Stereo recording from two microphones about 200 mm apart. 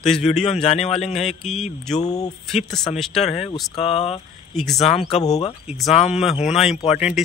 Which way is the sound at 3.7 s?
30° left (ahead or behind).